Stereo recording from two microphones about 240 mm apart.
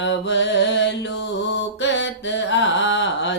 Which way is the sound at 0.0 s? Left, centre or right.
Left.